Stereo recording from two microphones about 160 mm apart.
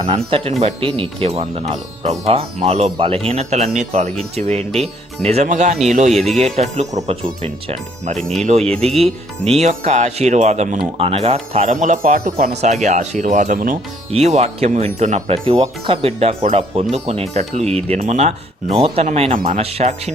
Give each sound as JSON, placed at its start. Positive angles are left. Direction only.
{"t": 0.1, "sound": "speech", "side_deg": -35}
{"t": 8.1, "sound": "speech", "side_deg": 0}
{"t": 8.4, "sound": "speech", "side_deg": -40}
{"t": 14.1, "sound": "speech", "side_deg": -45}